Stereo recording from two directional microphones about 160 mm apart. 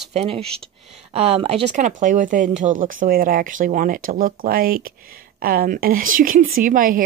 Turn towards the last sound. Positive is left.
turn(degrees=-60)  # may be behind; listen again after turning